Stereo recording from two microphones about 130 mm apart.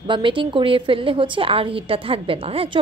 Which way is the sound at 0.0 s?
40° right (ahead or behind).